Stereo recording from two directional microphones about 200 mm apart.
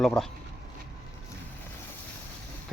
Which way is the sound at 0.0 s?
Centre (ahead or behind).